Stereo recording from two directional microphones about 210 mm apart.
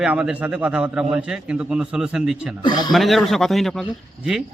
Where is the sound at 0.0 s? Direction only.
5° right (ahead or behind).